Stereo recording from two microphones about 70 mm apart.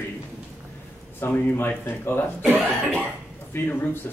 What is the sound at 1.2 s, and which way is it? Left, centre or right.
Speech, left.